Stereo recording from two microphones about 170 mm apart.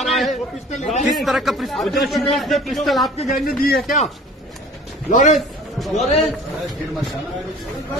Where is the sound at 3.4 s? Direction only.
60° left (ahead or behind).